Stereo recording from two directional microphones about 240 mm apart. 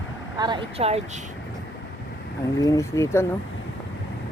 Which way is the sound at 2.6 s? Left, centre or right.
Centre.